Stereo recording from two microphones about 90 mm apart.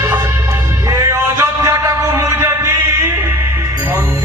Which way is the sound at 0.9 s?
35° right (ahead or behind).